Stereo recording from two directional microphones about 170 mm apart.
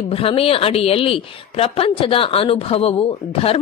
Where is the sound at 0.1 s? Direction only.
35° left (ahead or behind).